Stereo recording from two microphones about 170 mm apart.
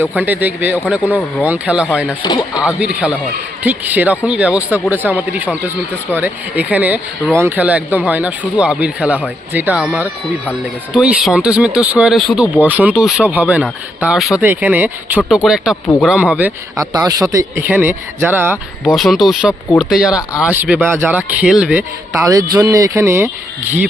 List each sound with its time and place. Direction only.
0.0 s speech: 10° right (ahead or behind)
2.2 s speech: 25° left (ahead or behind)
2.6 s speech: 10° right (ahead or behind)
16.7 s speech: 20° right (ahead or behind)
18.5 s speech: 5° left (ahead or behind); by 23.3 s 15° right (ahead or behind)